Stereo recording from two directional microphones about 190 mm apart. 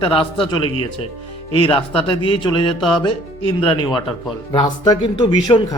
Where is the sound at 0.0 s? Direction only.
30° left (ahead or behind).